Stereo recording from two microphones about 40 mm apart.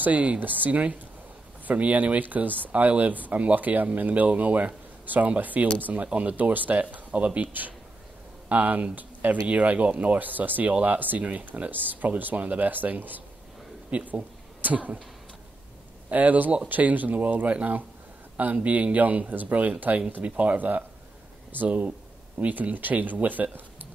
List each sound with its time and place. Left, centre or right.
0.0 s speech: right
7.1 s speech: right
11.7 s speech: right
16.1 s speech: right
21.6 s speech: right
22.4 s speech: right